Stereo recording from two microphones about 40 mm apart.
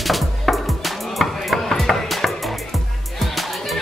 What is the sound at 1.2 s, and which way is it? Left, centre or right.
Chopping, centre.